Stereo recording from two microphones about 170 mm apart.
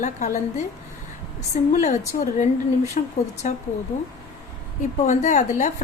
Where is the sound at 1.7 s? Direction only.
45° left (ahead or behind).